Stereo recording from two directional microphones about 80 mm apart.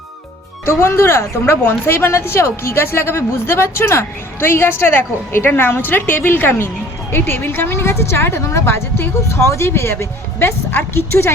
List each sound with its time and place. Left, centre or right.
0.6 s speech: left